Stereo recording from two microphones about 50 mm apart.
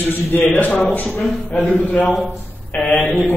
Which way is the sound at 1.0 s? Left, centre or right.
Centre.